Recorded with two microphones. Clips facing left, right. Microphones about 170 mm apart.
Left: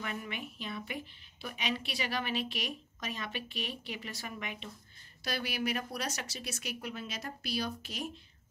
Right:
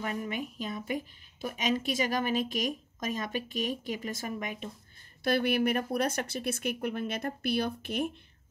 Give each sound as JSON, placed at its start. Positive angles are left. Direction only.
{"t": 0.0, "sound": "a woman's voice", "side_deg": -40}
{"t": 5.2, "sound": "speech", "side_deg": -55}